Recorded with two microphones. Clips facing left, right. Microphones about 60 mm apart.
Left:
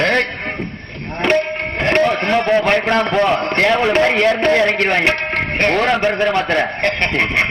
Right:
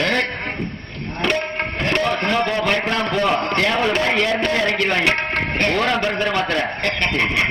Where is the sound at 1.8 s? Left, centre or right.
Left.